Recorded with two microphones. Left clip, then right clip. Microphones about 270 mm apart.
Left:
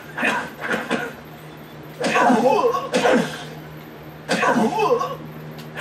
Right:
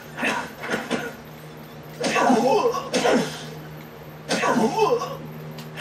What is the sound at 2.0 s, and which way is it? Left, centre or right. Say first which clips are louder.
Sneeze: left 3 dB; centre.